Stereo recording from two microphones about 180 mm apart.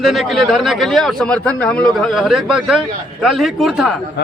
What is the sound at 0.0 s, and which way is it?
Speech, centre (ahead or behind).